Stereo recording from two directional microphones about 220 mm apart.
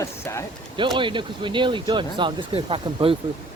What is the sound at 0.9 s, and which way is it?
Speech, 20° right (ahead or behind).